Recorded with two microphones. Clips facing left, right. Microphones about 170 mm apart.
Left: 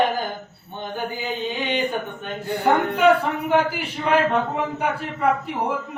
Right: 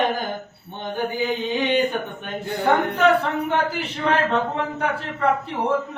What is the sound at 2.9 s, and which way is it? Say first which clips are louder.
A man's voice: left 1 dB; 10° left (ahead or behind).